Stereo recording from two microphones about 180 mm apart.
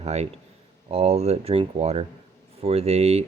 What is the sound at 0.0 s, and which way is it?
A man's voice, 35° right (ahead or behind).